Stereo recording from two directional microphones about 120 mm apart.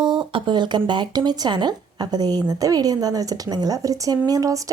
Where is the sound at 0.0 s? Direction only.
40° right (ahead or behind).